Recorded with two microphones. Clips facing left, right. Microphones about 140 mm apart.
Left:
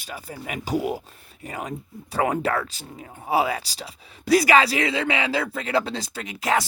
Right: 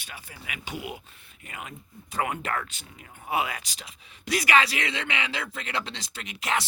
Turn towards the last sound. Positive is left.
turn(degrees=35)  # may be behind; listen again after turning